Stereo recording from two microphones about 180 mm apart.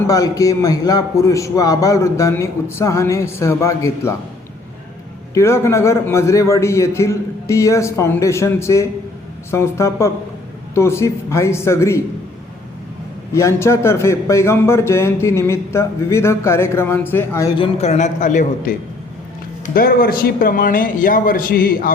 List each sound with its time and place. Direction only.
0.1 s a man's voice: 20° left (ahead or behind)
5.3 s a man's voice: 15° left (ahead or behind)
13.3 s a man's voice: 15° left (ahead or behind)
17.6 s a man's voice: 35° left (ahead or behind)
19.6 s a man's voice: 55° left (ahead or behind)